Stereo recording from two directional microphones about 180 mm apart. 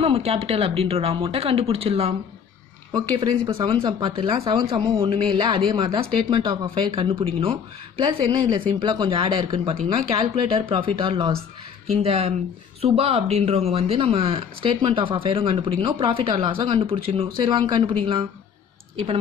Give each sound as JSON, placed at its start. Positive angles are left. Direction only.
{"t": 0.0, "sound": "speech", "side_deg": -35}